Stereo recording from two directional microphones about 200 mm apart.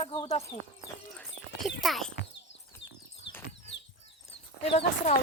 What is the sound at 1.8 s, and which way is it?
Speech, centre (ahead or behind).